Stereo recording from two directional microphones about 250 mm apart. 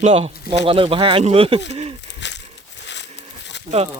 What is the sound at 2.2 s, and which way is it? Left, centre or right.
Crumpling, left.